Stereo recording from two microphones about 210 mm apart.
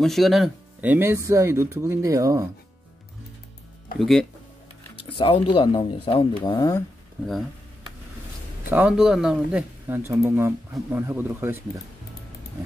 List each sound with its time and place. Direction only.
0.0 s speech: centre (ahead or behind); by 2.5 s 15° right (ahead or behind)
4.0 s speech: centre (ahead or behind)
4.9 s speech: 25° left (ahead or behind)
8.6 s speech: 5° right (ahead or behind)